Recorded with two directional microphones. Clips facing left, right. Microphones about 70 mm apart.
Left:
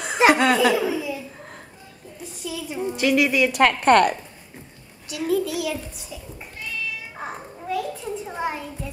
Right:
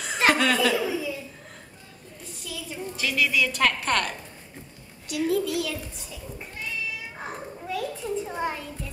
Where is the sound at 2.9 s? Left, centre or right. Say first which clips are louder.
Left 6 dB; left.